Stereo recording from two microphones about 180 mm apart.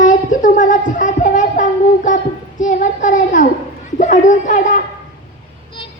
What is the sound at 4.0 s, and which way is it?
Bird, 45° left (ahead or behind).